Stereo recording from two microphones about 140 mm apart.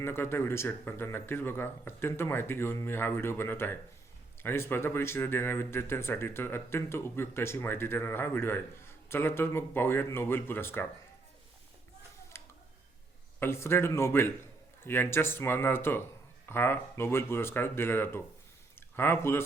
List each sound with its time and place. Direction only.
0.0 s speech: 15° left (ahead or behind)
12.3 s tick-tock: 20° left (ahead or behind)
13.4 s speech: 20° left (ahead or behind)